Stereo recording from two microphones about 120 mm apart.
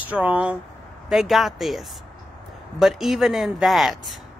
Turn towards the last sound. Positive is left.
turn(degrees=0)  # may be behind; listen again after turning